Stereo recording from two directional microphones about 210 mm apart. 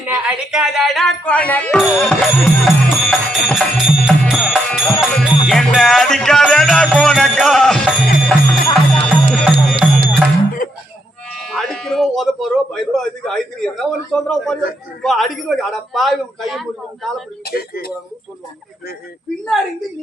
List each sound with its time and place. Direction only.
0.1 s a man's voice: 5° right (ahead or behind)
2.0 s music: 5° left (ahead or behind)
11.3 s sheep: centre (ahead or behind)
15.0 s a man's voice: centre (ahead or behind)
17.4 s speech: 45° left (ahead or behind)